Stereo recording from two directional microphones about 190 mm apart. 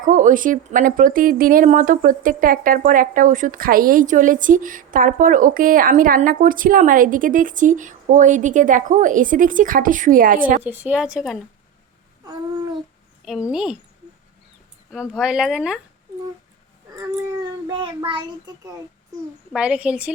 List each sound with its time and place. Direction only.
0.0 s speech: 45° right (ahead or behind)
10.6 s speech: 10° right (ahead or behind)
13.2 s speech: 5° right (ahead or behind)
14.9 s speech: 5° right (ahead or behind)
17.7 s a child's voice: 25° right (ahead or behind)
19.5 s speech: 5° right (ahead or behind)